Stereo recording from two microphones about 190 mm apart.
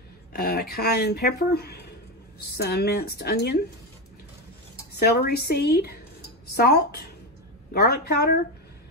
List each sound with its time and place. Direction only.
0.3 s speech: 55° left (ahead or behind)
4.9 s speech: 55° left (ahead or behind)